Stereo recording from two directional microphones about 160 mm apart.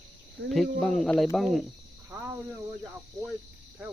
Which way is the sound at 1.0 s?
Centre (ahead or behind).